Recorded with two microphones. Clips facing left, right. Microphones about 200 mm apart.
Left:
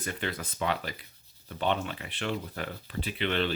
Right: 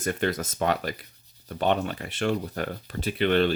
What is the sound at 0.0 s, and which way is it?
Speech, 45° right (ahead or behind).